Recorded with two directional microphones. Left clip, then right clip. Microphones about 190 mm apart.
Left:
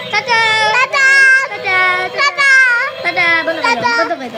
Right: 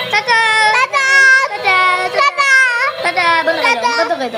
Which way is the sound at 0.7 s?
5° left (ahead or behind).